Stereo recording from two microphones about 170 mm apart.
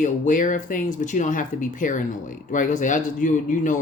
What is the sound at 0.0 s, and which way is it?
Speech, 50° left (ahead or behind).